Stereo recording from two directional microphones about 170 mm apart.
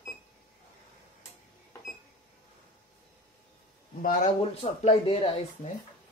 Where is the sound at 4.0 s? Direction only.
50° left (ahead or behind); by 5.3 s 35° left (ahead or behind).